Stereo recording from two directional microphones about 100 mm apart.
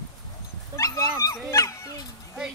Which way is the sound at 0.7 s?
35° left (ahead or behind).